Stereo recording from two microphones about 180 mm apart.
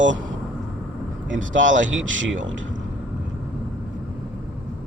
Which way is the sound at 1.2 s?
90° right.